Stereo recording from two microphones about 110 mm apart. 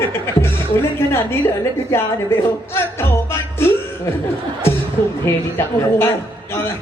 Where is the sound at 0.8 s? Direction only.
20° left (ahead or behind).